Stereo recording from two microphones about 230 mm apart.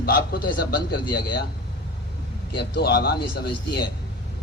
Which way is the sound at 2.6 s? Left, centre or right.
Left.